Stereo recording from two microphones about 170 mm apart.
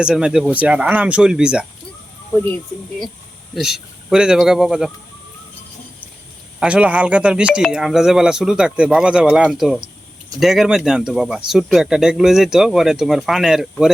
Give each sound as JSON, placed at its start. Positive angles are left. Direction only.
{"t": 0.0, "sound": "speech", "side_deg": -5}
{"t": 3.5, "sound": "speech", "side_deg": -5}
{"t": 6.6, "sound": "speech", "side_deg": -5}